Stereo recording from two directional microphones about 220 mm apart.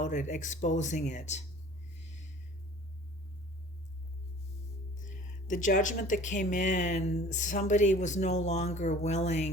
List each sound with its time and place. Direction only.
0.0 s speech: 35° left (ahead or behind)
2.0 s a sound: 30° left (ahead or behind)
4.9 s speech: 35° left (ahead or behind)